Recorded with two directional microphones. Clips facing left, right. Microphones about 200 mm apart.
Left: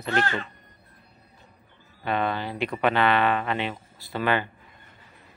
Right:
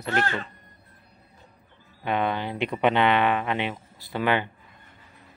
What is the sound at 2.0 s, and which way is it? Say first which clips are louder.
Speech: right 1 dB; 15° right (ahead or behind).